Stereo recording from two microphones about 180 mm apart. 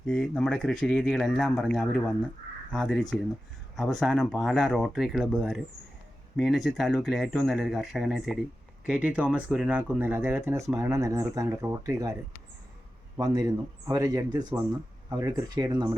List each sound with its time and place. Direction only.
0.0 s speech: 5° left (ahead or behind); by 12.1 s 15° right (ahead or behind)
13.1 s a man's voice: 20° right (ahead or behind)